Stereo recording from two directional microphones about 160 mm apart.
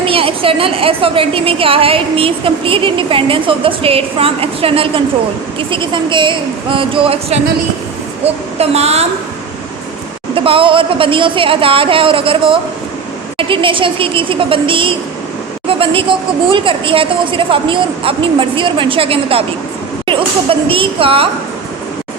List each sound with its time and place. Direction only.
0.0 s a woman's voice: 35° right (ahead or behind)
10.3 s a woman's voice: 35° right (ahead or behind)